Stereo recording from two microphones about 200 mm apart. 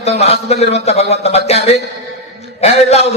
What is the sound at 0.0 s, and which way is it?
A man's voice, 30° left (ahead or behind).